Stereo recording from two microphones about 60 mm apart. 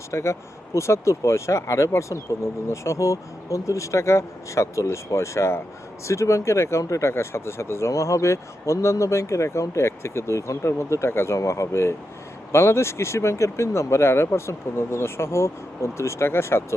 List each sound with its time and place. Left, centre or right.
0.1 s speech: left
11.3 s speech: left